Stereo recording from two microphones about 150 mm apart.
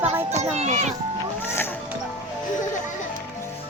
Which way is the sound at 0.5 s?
50° right (ahead or behind).